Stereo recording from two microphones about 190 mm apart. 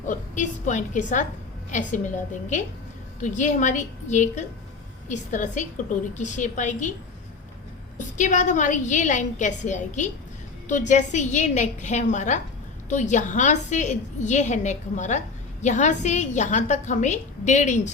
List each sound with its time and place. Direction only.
0.1 s a woman's voice: 40° left (ahead or behind)
7.9 s a woman's voice: 40° left (ahead or behind)